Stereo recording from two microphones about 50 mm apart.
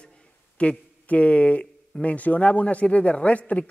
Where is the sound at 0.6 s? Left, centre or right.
Left.